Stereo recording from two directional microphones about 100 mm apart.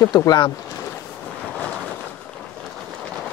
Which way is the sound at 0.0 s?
45° left (ahead or behind).